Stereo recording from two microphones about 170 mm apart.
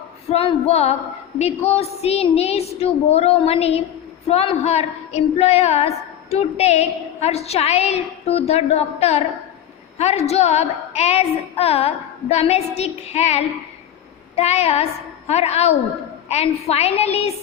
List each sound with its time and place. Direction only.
0.3 s a woman's voice: 35° left (ahead or behind)